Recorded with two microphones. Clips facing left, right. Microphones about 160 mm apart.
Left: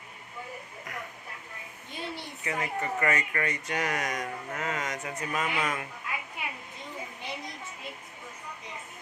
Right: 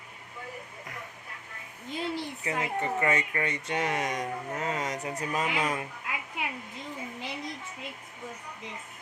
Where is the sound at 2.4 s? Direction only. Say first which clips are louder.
Left 1 dB; 30° right (ahead or behind).